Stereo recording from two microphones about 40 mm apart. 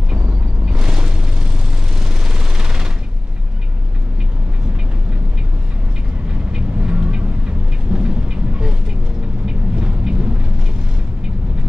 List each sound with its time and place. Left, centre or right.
0.7 s vehicle: right
2.0 s a sound: centre
6.5 s vehicle: right